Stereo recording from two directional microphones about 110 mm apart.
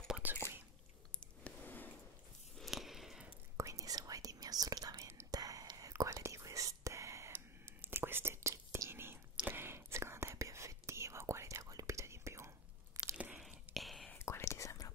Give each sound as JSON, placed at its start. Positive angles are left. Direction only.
{"t": 0.1, "sound": "whispering", "side_deg": -15}
{"t": 1.4, "sound": "a sound", "side_deg": 15}
{"t": 2.5, "sound": "a sound", "side_deg": 0}
{"t": 3.5, "sound": "whispering", "side_deg": -30}
{"t": 13.1, "sound": "whispering", "side_deg": -5}
{"t": 14.1, "sound": "whispering", "side_deg": 25}